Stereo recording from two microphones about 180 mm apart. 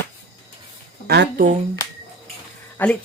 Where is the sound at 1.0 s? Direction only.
65° right (ahead or behind).